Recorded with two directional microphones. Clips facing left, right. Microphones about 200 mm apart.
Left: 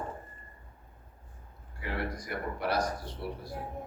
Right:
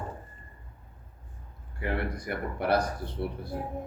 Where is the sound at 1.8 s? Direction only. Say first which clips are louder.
Right 4 dB; 60° right (ahead or behind).